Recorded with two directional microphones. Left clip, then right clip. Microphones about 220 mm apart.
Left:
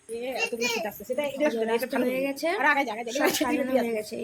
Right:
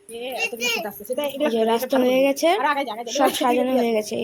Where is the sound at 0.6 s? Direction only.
35° right (ahead or behind).